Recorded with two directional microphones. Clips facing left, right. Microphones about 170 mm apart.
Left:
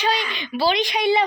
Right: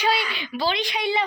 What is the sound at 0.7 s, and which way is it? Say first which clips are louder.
Speech: left 5 dB; 85° left.